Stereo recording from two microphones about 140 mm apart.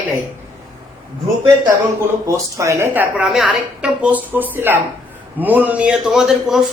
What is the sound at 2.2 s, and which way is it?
Speech, 20° right (ahead or behind).